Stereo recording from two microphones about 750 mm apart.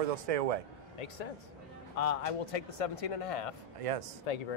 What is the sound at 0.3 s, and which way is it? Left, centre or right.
Speech, right.